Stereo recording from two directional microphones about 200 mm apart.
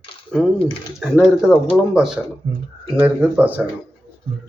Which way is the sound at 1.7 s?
Centre (ahead or behind).